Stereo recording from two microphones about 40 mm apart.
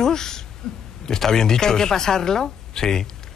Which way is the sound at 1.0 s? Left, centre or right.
Centre.